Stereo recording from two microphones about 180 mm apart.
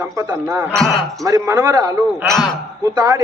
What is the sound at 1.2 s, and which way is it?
Speech, 20° right (ahead or behind).